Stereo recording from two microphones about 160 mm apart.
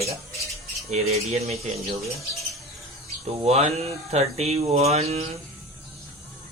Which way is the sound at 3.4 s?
40° right (ahead or behind).